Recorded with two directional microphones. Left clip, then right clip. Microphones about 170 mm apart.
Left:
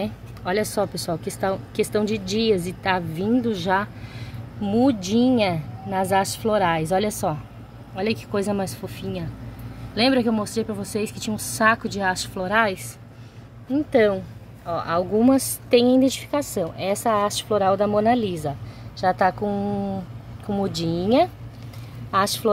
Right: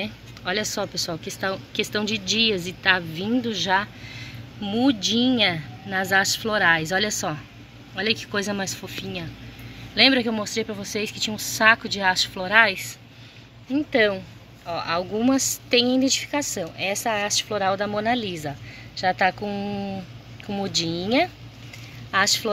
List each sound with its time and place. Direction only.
0.0 s speech: 20° left (ahead or behind)